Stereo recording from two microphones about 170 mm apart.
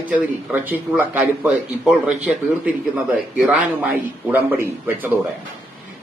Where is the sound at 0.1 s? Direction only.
10° right (ahead or behind).